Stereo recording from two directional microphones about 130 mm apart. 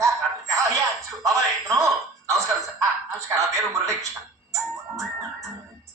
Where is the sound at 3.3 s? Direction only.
25° right (ahead or behind).